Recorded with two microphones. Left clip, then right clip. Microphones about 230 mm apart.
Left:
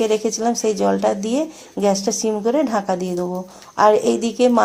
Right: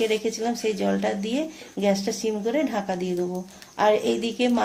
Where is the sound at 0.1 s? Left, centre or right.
Left.